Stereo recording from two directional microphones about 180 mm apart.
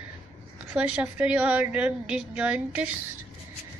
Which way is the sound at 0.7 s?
10° right (ahead or behind).